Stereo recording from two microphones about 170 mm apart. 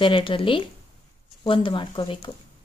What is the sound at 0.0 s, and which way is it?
A woman's voice, 30° left (ahead or behind).